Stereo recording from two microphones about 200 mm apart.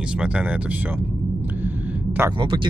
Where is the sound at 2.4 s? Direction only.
25° right (ahead or behind).